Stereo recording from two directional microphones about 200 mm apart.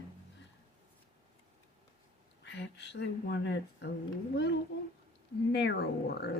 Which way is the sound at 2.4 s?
60° left (ahead or behind).